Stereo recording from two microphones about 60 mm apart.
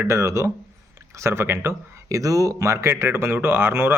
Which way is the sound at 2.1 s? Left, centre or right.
Right.